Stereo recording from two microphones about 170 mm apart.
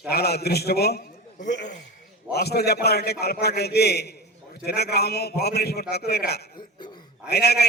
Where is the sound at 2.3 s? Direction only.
70° left (ahead or behind).